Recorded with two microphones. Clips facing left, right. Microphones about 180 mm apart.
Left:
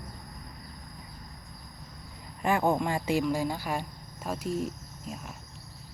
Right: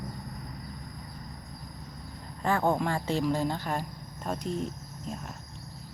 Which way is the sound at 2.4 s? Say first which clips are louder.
Left 1 dB; 10° left (ahead or behind).